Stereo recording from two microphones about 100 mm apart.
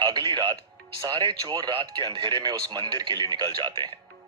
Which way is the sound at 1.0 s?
50° right (ahead or behind).